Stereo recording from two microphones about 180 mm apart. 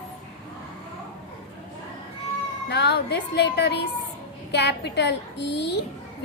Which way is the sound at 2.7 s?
65° left (ahead or behind).